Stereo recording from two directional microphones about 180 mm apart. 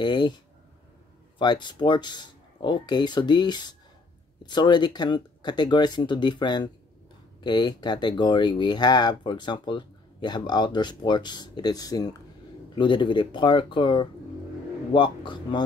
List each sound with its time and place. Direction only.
0.0 s speech: 25° left (ahead or behind)
1.4 s speech: 25° left (ahead or behind)